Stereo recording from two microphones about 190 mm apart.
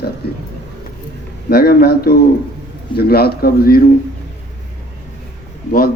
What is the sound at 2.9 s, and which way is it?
Speech, 55° left (ahead or behind).